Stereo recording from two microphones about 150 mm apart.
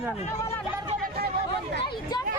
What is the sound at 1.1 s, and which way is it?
Chatter, 90° right.